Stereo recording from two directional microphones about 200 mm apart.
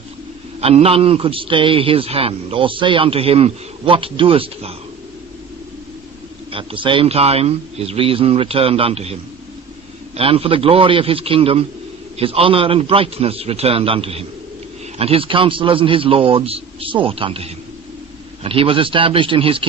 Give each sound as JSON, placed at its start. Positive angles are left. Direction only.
{"t": 0.6, "sound": "a man's voice", "side_deg": -30}
{"t": 6.5, "sound": "a man's voice", "side_deg": -25}
{"t": 10.2, "sound": "a man's voice", "side_deg": -30}